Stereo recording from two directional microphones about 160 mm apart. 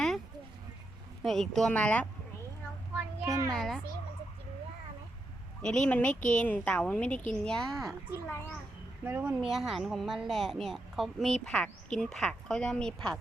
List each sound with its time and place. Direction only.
1.2 s a woman's voice: centre (ahead or behind)
3.2 s a child's voice: 20° right (ahead or behind)
3.5 s a woman's voice: centre (ahead or behind)
5.6 s a woman's voice: 5° left (ahead or behind)
9.0 s a woman's voice: 10° right (ahead or behind); by 13.1 s 5° left (ahead or behind)